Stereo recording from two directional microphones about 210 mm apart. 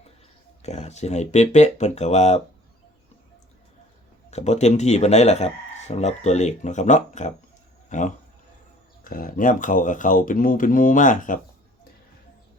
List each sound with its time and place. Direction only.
0.6 s speech: 30° left (ahead or behind)
4.3 s speech: 30° left (ahead or behind)